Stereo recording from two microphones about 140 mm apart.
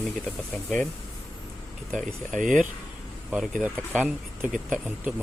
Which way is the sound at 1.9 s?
65° right (ahead or behind).